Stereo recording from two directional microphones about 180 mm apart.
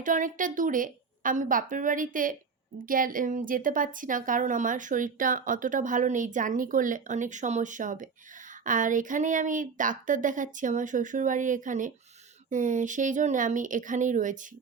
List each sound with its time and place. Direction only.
0.0 s a woman's voice: 45° right (ahead or behind)